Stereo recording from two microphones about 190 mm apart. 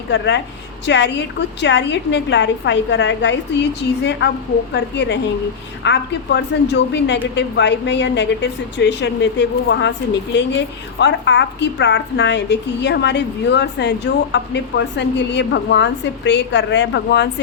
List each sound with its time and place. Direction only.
0.1 s a woman's voice: 70° left (ahead or behind)